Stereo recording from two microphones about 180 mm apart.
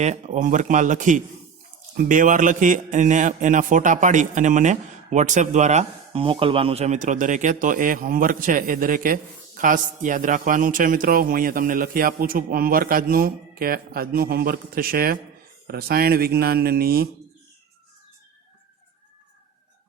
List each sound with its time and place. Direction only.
0.0 s a man's voice: 40° right (ahead or behind)